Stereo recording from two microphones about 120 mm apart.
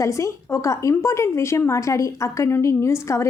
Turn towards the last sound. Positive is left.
turn(degrees=25)  # may be behind; listen again after turning